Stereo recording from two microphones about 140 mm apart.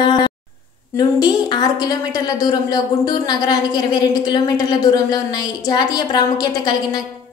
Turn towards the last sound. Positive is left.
turn(degrees=25)  # may be behind; listen again after turning